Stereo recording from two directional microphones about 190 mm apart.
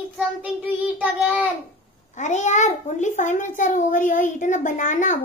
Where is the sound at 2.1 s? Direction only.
40° left (ahead or behind).